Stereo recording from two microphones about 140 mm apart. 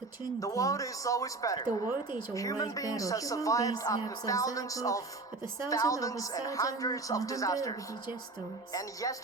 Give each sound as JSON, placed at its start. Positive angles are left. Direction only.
{"t": 0.3, "sound": "speech", "side_deg": 25}